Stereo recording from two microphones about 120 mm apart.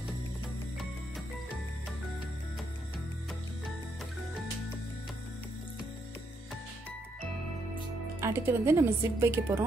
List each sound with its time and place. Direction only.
8.2 s speech: 20° right (ahead or behind)